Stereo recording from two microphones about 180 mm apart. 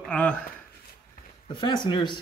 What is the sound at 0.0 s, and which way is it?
Speech, 5° left (ahead or behind).